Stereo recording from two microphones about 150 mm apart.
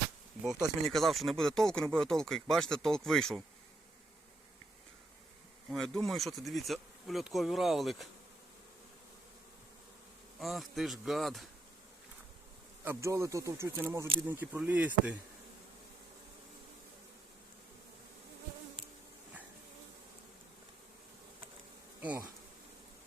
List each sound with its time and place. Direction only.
0.8 s speech: centre (ahead or behind)
5.7 s speech: 5° left (ahead or behind)
10.4 s speech: centre (ahead or behind)
12.8 s speech: 15° right (ahead or behind)